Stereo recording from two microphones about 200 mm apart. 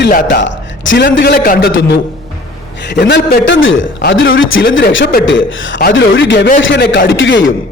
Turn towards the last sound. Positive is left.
turn(degrees=65)  # may be behind; listen again after turning